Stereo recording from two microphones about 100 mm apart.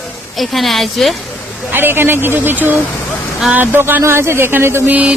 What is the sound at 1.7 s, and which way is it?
Speech, 20° right (ahead or behind).